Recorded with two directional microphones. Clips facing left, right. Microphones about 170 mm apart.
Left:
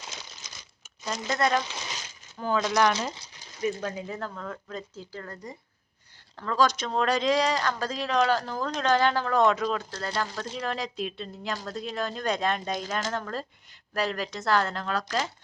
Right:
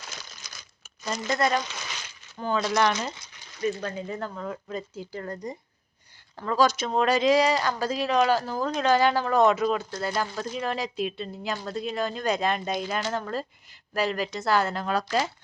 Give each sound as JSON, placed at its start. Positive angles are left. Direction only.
{"t": 0.0, "sound": "crumpling", "side_deg": 20}
{"t": 1.0, "sound": "speech", "side_deg": 0}
{"t": 3.6, "sound": "speech", "side_deg": 10}
{"t": 4.4, "sound": "speech", "side_deg": -15}